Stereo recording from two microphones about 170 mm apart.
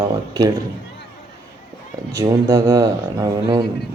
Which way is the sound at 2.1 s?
20° right (ahead or behind).